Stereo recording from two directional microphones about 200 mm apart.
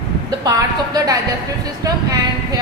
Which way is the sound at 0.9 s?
15° right (ahead or behind).